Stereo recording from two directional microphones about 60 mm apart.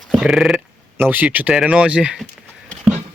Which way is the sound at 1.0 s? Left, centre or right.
Right.